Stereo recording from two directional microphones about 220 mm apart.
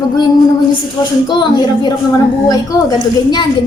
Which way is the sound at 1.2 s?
20° left (ahead or behind).